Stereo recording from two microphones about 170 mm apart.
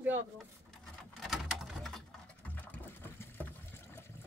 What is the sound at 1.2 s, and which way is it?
Sewing machine, centre (ahead or behind).